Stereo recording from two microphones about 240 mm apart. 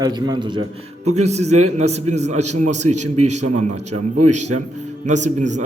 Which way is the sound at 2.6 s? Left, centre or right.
Right.